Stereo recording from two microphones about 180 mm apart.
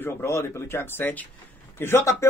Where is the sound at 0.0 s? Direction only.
15° left (ahead or behind).